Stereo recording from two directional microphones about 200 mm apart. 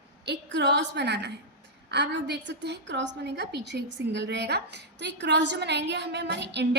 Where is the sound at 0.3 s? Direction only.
60° right (ahead or behind).